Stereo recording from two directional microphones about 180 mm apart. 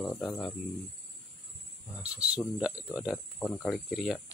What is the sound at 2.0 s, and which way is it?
Speech, 5° right (ahead or behind).